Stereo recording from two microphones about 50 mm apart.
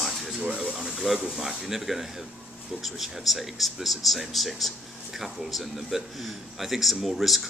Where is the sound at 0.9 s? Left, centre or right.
Centre.